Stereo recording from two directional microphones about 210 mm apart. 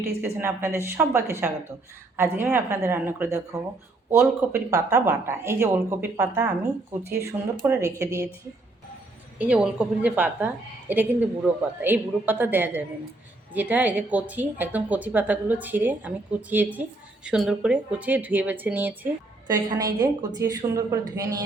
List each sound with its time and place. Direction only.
0.3 s a woman's voice: 10° right (ahead or behind)
9.4 s a woman's voice: 5° right (ahead or behind)